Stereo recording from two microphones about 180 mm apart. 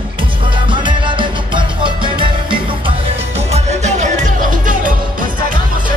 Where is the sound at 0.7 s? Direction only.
25° right (ahead or behind).